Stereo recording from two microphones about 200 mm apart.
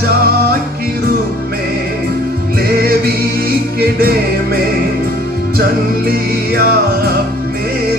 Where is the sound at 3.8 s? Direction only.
50° right (ahead or behind).